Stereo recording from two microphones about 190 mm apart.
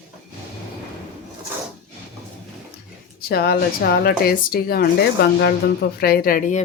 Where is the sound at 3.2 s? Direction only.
55° left (ahead or behind).